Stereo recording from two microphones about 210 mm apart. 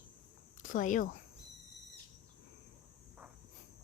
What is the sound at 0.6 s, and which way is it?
Speech, 40° left (ahead or behind).